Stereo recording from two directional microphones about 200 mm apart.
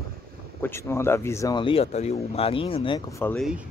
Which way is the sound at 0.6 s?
10° left (ahead or behind).